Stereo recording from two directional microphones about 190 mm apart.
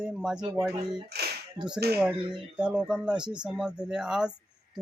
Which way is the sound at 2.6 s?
5° right (ahead or behind).